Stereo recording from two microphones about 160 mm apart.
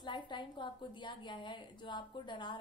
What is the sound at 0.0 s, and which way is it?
A woman's voice, 30° left (ahead or behind).